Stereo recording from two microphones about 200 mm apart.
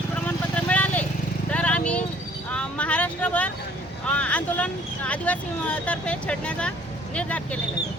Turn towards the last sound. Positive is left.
turn(degrees=5)  # may be behind; listen again after turning